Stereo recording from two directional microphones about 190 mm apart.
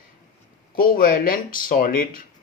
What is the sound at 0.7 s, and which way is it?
Speech, 50° left (ahead or behind).